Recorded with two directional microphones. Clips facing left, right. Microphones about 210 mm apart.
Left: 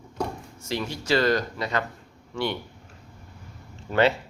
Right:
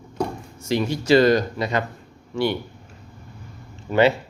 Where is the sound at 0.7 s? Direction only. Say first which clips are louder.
Right 8 dB; 15° right (ahead or behind).